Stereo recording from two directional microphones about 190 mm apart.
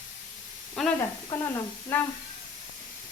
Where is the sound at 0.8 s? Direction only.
Centre (ahead or behind).